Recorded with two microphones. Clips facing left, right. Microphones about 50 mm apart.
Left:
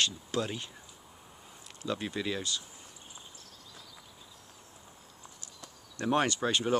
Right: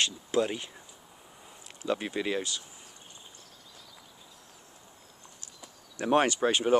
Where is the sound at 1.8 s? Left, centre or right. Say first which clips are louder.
Right 3 dB; right.